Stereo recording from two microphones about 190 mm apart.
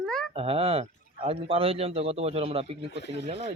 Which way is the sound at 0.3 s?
30° right (ahead or behind).